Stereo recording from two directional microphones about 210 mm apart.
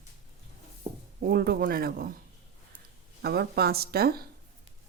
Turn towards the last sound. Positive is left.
turn(degrees=-45)  # may be behind; listen again after turning